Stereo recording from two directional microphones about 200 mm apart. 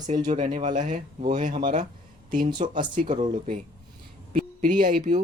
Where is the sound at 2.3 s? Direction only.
45° right (ahead or behind).